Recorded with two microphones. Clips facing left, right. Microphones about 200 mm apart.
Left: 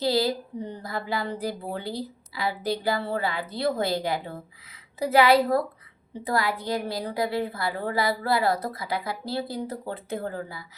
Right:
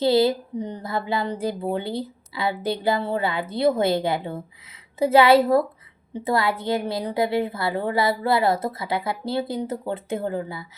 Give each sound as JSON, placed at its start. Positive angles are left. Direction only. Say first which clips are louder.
{"t": 0.0, "sound": "a woman's voice", "louder": "right 6 dB", "side_deg": -25}